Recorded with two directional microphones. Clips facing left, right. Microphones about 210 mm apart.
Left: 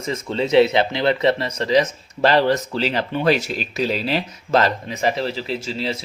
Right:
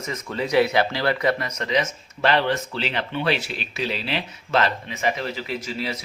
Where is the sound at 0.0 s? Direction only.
30° left (ahead or behind).